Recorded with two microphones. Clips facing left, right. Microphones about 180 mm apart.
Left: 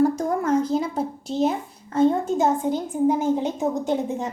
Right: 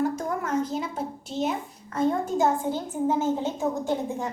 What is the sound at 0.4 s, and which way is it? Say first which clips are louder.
A child's voice: left 7 dB; 35° left (ahead or behind).